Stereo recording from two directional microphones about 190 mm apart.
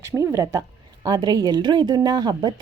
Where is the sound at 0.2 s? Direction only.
15° right (ahead or behind).